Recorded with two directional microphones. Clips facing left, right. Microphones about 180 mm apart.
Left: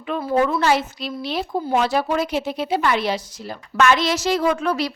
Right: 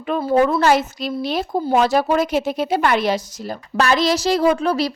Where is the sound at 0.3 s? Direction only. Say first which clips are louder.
Right 3 dB; 40° right (ahead or behind).